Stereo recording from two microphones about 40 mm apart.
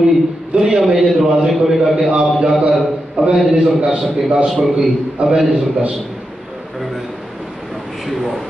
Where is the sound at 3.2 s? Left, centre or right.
Right.